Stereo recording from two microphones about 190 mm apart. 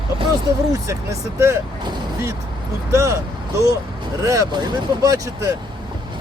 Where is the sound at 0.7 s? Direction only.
15° right (ahead or behind).